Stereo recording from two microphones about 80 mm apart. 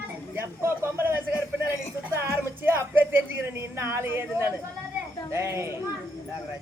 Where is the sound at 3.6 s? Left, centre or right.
Right.